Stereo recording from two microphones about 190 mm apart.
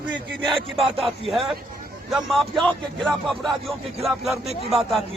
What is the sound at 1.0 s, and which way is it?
Speech, centre (ahead or behind).